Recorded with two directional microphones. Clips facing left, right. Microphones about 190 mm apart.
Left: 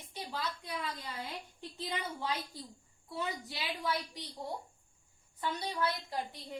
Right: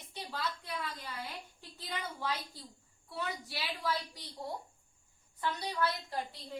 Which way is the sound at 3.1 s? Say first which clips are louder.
Left 1 dB; 20° left (ahead or behind).